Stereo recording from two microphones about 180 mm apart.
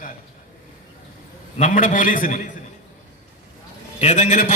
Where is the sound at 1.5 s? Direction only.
45° left (ahead or behind).